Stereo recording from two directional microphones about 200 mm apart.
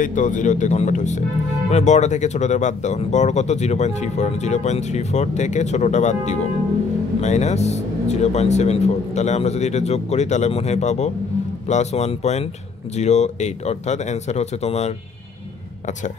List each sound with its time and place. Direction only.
0.0 s speech: 40° left (ahead or behind)